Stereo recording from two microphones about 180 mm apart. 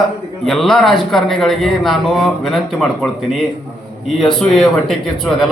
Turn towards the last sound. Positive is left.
turn(degrees=0)  # may be behind; listen again after turning